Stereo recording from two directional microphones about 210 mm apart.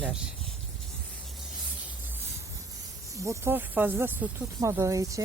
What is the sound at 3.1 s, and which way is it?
Speech, 15° right (ahead or behind).